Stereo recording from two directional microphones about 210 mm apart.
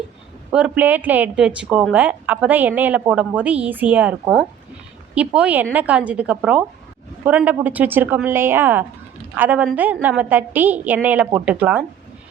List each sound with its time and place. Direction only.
0.5 s speech: 5° right (ahead or behind)